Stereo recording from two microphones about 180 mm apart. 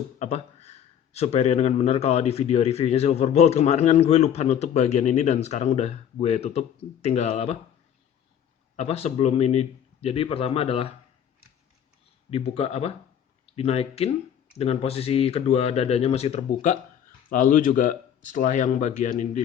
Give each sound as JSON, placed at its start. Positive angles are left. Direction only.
{"t": 0.2, "sound": "speech", "side_deg": 40}
{"t": 8.7, "sound": "speech", "side_deg": 35}
{"t": 12.3, "sound": "speech", "side_deg": 35}
{"t": 17.2, "sound": "speech", "side_deg": 50}